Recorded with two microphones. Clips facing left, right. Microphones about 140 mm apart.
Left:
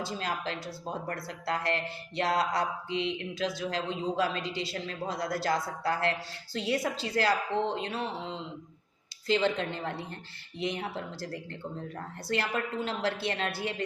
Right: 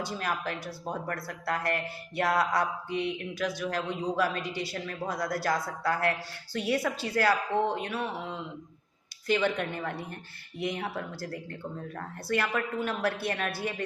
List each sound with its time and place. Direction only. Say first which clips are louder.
0.0 s speech: right 1 dB; 25° left (ahead or behind)
12.3 s speech: right 2 dB; 25° left (ahead or behind)